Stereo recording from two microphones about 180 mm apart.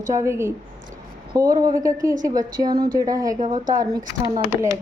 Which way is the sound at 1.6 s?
20° right (ahead or behind).